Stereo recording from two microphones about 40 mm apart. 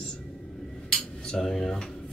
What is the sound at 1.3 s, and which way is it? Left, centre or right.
Speech, centre.